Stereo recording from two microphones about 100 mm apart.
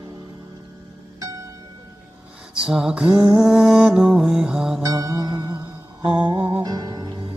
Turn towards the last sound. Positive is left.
turn(degrees=-40)  # may be behind; listen again after turning